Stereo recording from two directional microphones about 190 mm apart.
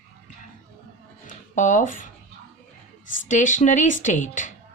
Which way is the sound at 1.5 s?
40° left (ahead or behind).